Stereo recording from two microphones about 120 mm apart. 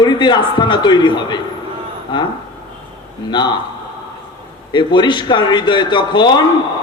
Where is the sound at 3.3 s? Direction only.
40° left (ahead or behind).